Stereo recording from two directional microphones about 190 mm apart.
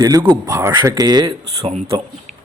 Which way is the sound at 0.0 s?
20° right (ahead or behind).